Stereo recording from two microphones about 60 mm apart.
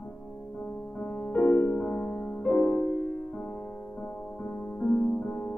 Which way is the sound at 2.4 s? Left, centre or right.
Centre.